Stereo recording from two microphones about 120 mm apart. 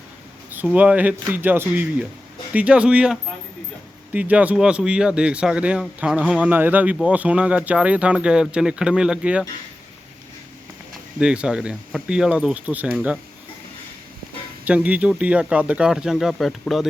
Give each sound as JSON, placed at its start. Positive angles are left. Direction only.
{"t": 0.5, "sound": "speech", "side_deg": -15}
{"t": 11.2, "sound": "speech", "side_deg": -5}
{"t": 14.6, "sound": "speech", "side_deg": -10}